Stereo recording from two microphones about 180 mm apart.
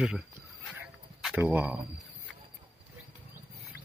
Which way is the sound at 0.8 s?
Centre (ahead or behind).